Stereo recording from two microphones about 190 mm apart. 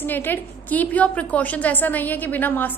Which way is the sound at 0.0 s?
10° left (ahead or behind).